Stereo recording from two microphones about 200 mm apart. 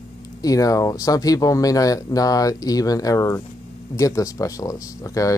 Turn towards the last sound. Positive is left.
turn(degrees=15)  # may be behind; listen again after turning